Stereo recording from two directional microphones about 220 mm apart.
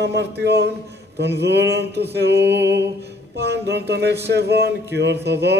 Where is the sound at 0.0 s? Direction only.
50° right (ahead or behind).